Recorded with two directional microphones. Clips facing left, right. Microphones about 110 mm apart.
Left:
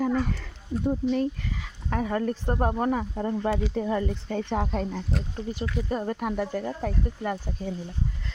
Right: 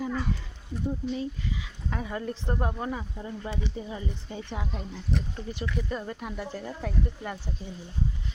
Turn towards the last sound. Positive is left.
turn(degrees=50)  # may be behind; listen again after turning